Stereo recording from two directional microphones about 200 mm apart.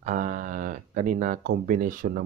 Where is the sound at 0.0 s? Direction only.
40° right (ahead or behind).